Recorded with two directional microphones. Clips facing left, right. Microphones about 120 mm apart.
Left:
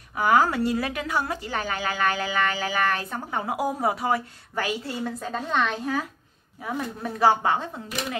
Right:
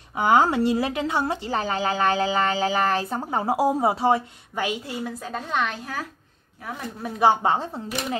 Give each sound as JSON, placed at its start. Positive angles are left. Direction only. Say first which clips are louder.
{"t": 0.1, "sound": "a woman's voice", "louder": "right 2 dB", "side_deg": -25}
{"t": 5.0, "sound": "a woman's voice", "louder": "left 1 dB", "side_deg": -5}
{"t": 7.2, "sound": "a woman's voice", "louder": "right 1 dB", "side_deg": -25}